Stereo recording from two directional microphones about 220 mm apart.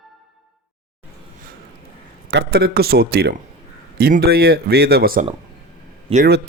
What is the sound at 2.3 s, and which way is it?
Speech, 50° right (ahead or behind).